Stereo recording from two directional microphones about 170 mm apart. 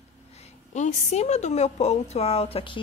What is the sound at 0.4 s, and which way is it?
A woman's voice, 45° left (ahead or behind).